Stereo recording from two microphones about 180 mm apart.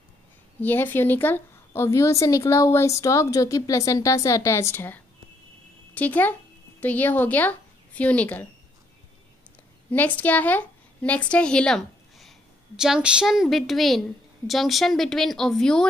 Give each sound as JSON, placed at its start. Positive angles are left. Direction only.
{"t": 0.6, "sound": "a woman's voice", "side_deg": 10}
{"t": 9.8, "sound": "a woman's voice", "side_deg": 10}